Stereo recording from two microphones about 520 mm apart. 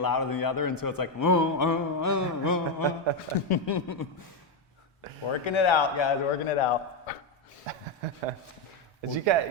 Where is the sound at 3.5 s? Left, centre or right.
Left.